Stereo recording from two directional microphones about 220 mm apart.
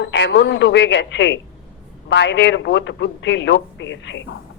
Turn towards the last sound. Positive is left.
turn(degrees=55)  # may be behind; listen again after turning